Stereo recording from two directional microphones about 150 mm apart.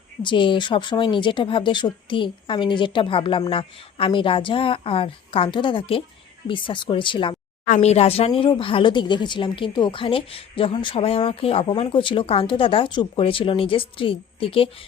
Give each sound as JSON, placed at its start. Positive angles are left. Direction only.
{"t": 0.2, "sound": "speech", "side_deg": 35}
{"t": 7.7, "sound": "speech", "side_deg": 45}